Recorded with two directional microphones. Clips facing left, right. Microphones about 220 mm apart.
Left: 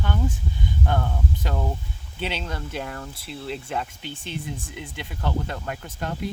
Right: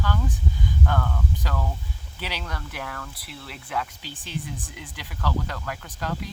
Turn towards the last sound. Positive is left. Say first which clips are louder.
# left 2 dB
turn(degrees=25)  # may be behind; listen again after turning